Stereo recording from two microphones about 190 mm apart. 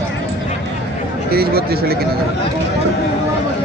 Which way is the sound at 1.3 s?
55° right (ahead or behind).